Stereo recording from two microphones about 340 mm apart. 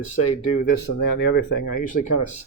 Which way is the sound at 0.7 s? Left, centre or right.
Left.